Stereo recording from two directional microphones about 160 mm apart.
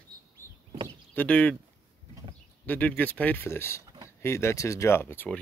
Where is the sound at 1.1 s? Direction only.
10° left (ahead or behind).